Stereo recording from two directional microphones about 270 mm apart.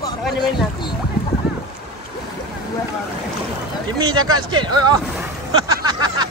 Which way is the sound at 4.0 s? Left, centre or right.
Centre.